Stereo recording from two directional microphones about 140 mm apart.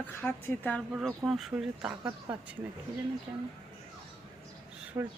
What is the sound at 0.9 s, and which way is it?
Speech, 5° right (ahead or behind).